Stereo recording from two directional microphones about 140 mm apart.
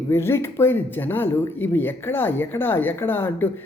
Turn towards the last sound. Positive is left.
turn(degrees=15)  # may be behind; listen again after turning